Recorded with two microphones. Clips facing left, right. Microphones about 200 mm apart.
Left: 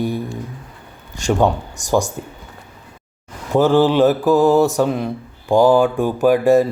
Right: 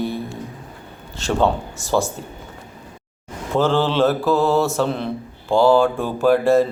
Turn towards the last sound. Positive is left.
turn(degrees=15)  # may be behind; listen again after turning